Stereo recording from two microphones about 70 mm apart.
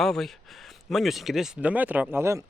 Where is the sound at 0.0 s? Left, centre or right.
Centre.